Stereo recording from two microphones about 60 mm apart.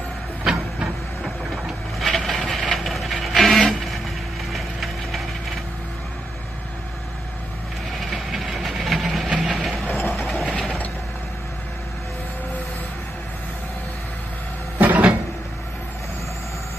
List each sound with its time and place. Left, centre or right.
0.4 s printer: centre
1.2 s printer: centre
2.7 s a sound: centre
4.5 s ratchet: centre
8.1 s train: centre
9.4 s vehicle: centre
10.1 s train: centre
14.8 s a sound: right